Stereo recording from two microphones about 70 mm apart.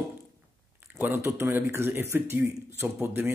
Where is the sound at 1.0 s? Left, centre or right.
Right.